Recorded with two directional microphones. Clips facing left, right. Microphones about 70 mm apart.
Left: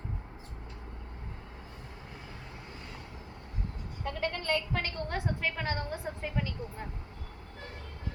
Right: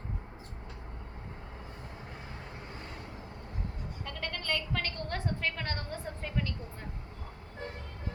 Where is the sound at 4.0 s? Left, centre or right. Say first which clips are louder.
Left 6 dB; centre.